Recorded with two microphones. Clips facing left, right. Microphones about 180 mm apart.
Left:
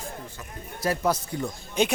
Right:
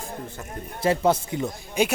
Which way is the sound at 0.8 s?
25° right (ahead or behind).